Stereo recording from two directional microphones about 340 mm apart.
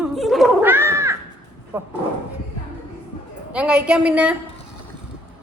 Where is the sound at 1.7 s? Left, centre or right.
Centre.